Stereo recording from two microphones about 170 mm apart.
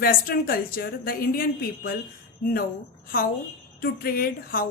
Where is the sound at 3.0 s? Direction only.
60° left (ahead or behind).